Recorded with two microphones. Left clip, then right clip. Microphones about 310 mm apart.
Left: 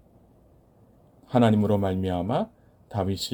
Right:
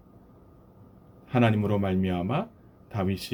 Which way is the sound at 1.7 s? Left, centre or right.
Left.